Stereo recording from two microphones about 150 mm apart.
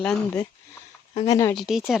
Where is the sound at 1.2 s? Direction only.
25° left (ahead or behind).